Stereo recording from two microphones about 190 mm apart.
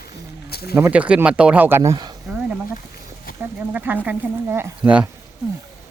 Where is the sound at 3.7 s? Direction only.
10° right (ahead or behind).